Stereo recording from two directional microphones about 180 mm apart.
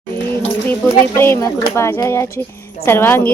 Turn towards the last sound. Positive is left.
turn(degrees=10)  # may be behind; listen again after turning